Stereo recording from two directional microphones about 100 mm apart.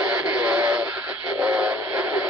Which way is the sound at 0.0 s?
10° right (ahead or behind).